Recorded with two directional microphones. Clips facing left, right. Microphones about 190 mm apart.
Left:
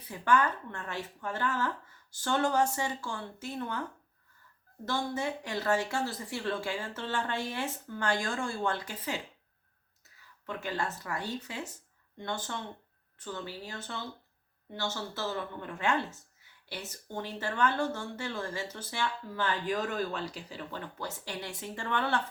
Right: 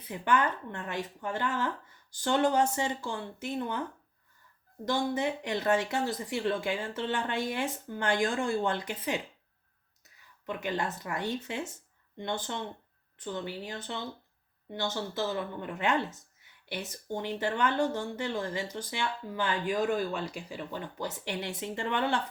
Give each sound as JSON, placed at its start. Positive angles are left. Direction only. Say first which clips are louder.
{"t": 0.1, "sound": "speech", "louder": "even", "side_deg": -20}
{"t": 4.9, "sound": "speech", "louder": "right 3 dB", "side_deg": -20}
{"t": 10.4, "sound": "speech", "louder": "right 2 dB", "side_deg": -15}